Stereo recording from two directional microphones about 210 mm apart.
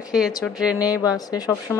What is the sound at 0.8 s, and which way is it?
Speech, 15° left (ahead or behind).